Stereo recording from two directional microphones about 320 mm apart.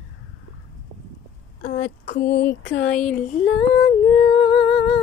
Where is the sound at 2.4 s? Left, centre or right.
Centre.